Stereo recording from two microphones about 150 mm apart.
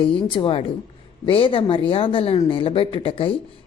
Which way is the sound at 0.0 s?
35° left (ahead or behind).